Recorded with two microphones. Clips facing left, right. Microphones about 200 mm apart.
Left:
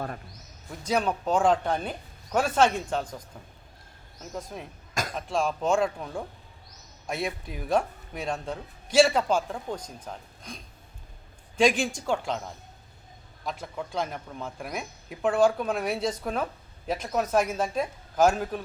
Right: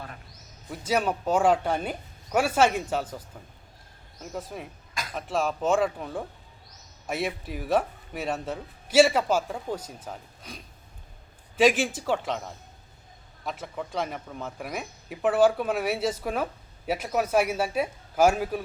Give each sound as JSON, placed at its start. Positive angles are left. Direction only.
{"t": 0.7, "sound": "a man's voice", "side_deg": -5}